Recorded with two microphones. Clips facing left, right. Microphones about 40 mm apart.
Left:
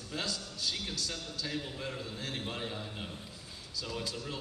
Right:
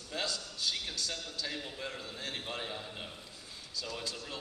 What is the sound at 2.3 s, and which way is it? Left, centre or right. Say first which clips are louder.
A man's voice: left 1 dB; centre.